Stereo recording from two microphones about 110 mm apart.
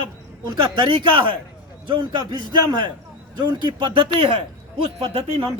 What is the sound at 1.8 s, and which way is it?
Speech, 45° right (ahead or behind).